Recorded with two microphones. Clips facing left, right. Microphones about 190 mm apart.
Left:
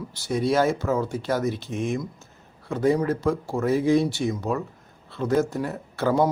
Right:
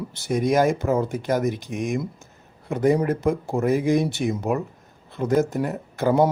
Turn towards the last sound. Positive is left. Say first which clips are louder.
# right 2 dB
turn(degrees=-15)  # may be behind; listen again after turning